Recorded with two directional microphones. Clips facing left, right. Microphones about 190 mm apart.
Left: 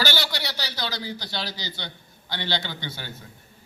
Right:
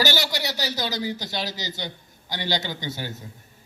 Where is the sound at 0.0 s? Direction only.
15° right (ahead or behind).